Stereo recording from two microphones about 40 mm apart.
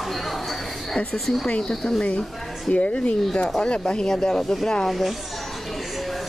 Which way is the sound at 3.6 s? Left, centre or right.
Left.